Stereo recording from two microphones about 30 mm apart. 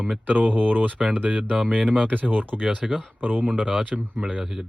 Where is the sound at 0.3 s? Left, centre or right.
Right.